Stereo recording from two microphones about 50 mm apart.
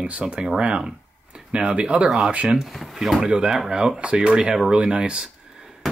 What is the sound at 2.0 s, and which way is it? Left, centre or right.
Speech, centre.